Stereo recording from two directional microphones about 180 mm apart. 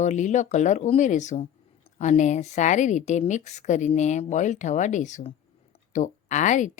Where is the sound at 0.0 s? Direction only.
40° left (ahead or behind).